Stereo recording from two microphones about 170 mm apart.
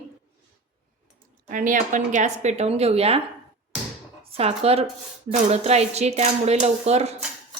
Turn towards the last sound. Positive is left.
turn(degrees=-40)  # may be behind; listen again after turning